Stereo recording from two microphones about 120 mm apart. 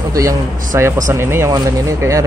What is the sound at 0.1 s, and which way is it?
Speech, 30° right (ahead or behind).